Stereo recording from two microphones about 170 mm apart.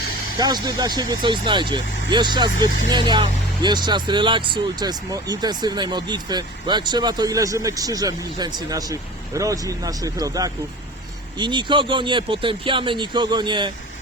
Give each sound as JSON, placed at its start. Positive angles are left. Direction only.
{"t": 0.3, "sound": "speech", "side_deg": -25}